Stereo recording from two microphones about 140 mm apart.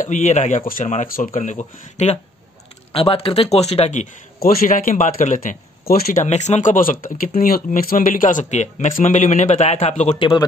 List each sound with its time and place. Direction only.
0.0 s speech: 60° left (ahead or behind)
2.9 s speech: 45° left (ahead or behind); by 6.1 s 90° left
6.2 s speech: 55° left (ahead or behind)
10.1 s speech: 35° left (ahead or behind)